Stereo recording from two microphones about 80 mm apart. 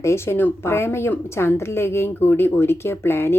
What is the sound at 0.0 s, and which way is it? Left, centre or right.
A woman's voice, left.